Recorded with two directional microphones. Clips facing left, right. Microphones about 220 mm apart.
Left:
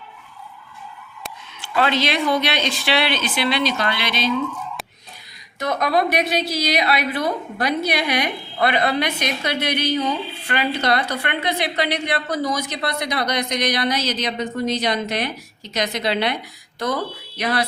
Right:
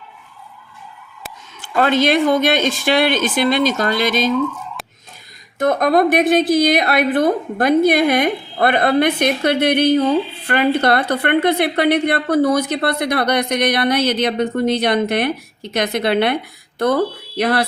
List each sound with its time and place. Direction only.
1.7 s speech: 50° right (ahead or behind)
5.5 s a woman's voice: 50° right (ahead or behind)